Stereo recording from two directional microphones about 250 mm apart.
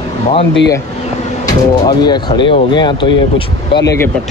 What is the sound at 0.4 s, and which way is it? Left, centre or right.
Speech, left.